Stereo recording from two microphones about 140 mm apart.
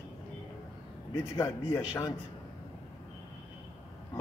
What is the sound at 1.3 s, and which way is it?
Speech, 20° left (ahead or behind).